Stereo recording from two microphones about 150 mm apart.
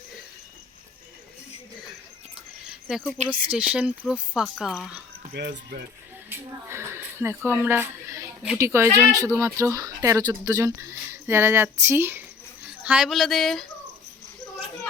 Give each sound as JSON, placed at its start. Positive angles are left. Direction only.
{"t": 2.6, "sound": "a sound", "side_deg": -5}
{"t": 3.5, "sound": "speech", "side_deg": -10}
{"t": 5.3, "sound": "speech", "side_deg": -90}
{"t": 6.3, "sound": "speech", "side_deg": -15}